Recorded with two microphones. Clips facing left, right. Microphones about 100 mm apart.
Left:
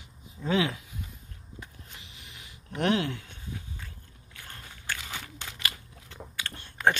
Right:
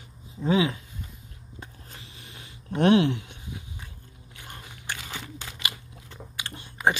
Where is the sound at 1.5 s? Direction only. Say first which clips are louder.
Right 2 dB; 30° right (ahead or behind); by 3.9 s 15° right (ahead or behind).